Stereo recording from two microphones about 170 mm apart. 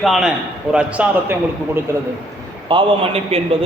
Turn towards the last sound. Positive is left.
turn(degrees=-35)  # may be behind; listen again after turning